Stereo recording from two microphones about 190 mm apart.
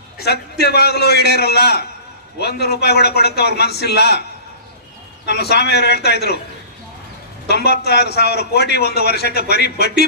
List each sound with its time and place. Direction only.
0.2 s a man's voice: 60° left (ahead or behind)
5.3 s a man's voice: 60° left (ahead or behind)
7.4 s a man's voice: 55° left (ahead or behind)